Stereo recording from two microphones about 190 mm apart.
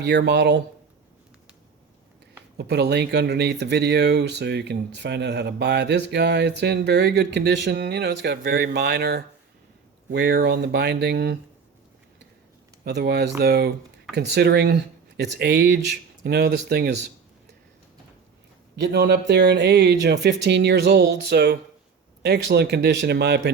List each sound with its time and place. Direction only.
0.0 s speech: 60° right (ahead or behind)
2.6 s speech: 60° right (ahead or behind)
12.8 s speech: 60° right (ahead or behind)
18.8 s speech: 60° right (ahead or behind)